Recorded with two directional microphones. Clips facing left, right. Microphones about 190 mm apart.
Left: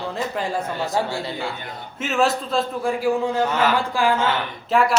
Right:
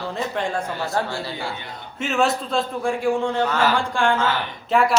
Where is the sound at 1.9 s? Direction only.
Centre (ahead or behind).